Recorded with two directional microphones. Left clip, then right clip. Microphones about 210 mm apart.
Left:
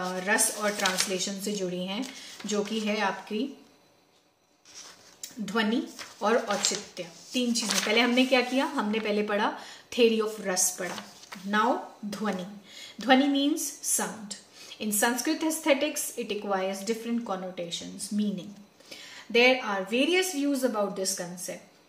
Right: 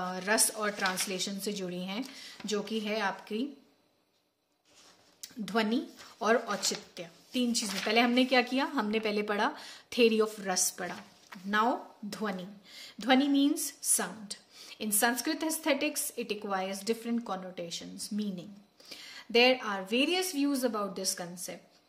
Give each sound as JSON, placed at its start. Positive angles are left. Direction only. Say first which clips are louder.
{"t": 0.0, "sound": "speech", "louder": "left 3 dB", "side_deg": -45}
{"t": 5.4, "sound": "a woman's voice", "louder": "left 3 dB", "side_deg": -40}